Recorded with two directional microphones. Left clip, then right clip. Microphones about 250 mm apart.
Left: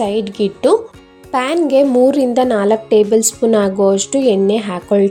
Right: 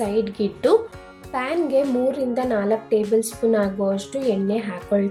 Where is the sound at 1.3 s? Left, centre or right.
Left.